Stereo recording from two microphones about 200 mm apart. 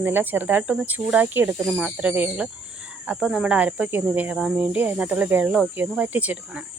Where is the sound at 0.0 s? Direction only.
10° right (ahead or behind).